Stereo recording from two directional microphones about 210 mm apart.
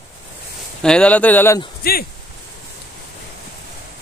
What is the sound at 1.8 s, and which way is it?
Speech, 45° left (ahead or behind).